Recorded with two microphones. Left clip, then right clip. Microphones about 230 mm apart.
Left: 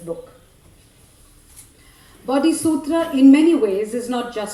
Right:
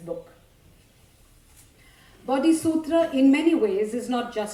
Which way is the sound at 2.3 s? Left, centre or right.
Right.